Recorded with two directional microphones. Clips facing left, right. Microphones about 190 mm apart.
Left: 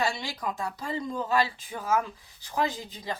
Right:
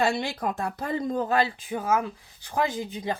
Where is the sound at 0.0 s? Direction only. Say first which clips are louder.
Right 5 dB; 55° right (ahead or behind).